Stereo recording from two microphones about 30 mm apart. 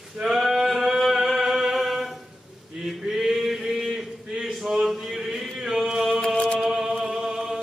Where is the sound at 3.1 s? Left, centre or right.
Centre.